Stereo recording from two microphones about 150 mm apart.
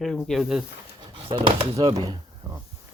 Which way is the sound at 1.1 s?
35° right (ahead or behind).